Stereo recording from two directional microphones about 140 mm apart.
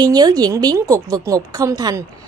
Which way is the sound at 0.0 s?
30° right (ahead or behind).